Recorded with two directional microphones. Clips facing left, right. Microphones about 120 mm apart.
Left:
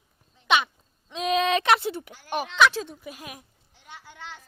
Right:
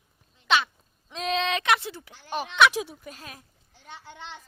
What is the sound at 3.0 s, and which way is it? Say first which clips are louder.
Speech: left 3 dB; 10° left (ahead or behind).